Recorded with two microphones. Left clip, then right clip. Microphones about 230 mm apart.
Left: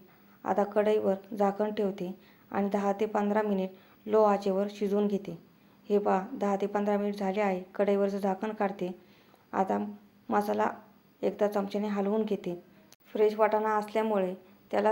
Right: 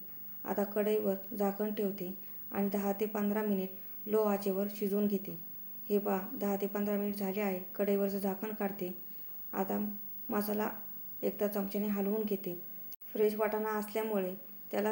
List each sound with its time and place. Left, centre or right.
0.4 s speech: centre